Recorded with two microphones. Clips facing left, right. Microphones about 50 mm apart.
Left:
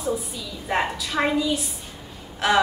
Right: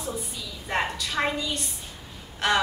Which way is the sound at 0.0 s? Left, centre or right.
Centre.